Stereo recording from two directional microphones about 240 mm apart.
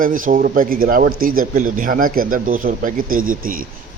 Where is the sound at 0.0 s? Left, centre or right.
Right.